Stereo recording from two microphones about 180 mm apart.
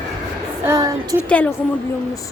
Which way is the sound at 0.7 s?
20° right (ahead or behind).